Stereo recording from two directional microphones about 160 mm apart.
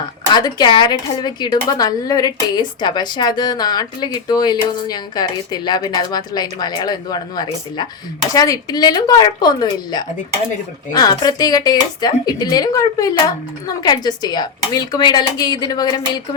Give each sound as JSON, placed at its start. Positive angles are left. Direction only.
{"t": 0.3, "sound": "speech", "side_deg": 30}